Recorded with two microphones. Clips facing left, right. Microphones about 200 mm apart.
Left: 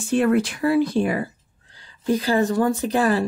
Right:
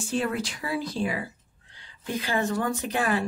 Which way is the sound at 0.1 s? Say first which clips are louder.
Left 10 dB; 60° left (ahead or behind).